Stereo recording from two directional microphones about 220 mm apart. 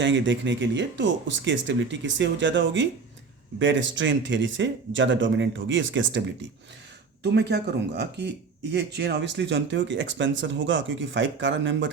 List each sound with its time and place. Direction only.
0.0 s speech: 55° right (ahead or behind)